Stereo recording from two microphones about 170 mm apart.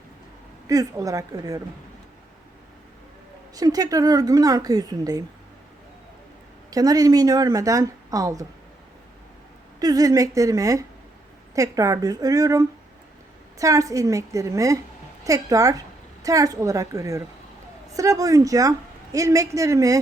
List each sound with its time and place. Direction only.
0.7 s speech: 20° right (ahead or behind)
3.5 s speech: 20° right (ahead or behind)
6.7 s speech: 20° right (ahead or behind)
9.8 s speech: 20° right (ahead or behind)